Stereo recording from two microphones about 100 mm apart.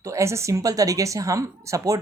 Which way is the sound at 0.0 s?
30° right (ahead or behind).